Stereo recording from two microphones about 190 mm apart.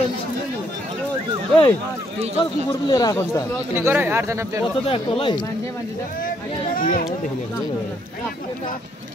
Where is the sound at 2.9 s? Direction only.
20° left (ahead or behind).